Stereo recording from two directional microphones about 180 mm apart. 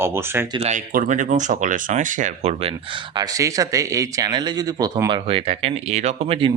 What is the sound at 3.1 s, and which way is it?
Speech, 20° right (ahead or behind).